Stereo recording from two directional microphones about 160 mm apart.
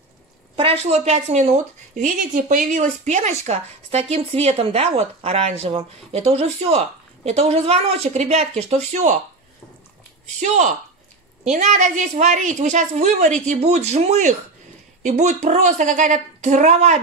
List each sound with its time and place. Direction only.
0.6 s a woman's voice: 40° right (ahead or behind)
10.4 s a woman's voice: 50° right (ahead or behind)